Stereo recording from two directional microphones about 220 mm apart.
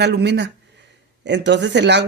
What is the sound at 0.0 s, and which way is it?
Speech, 50° right (ahead or behind).